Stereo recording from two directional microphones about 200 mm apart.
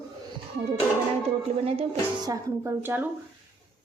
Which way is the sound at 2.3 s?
10° right (ahead or behind).